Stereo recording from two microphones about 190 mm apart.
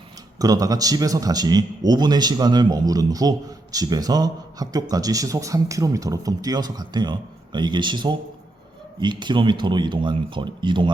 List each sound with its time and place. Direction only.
0.3 s a man's voice: 20° right (ahead or behind)